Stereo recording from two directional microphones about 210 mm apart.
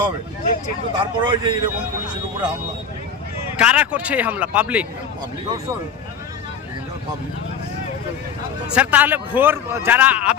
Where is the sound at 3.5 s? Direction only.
5° right (ahead or behind).